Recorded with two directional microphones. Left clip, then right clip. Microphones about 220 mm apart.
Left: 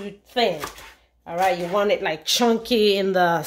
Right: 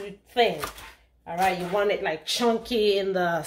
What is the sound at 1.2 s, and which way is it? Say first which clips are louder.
Speech: left 3 dB; 40° left (ahead or behind).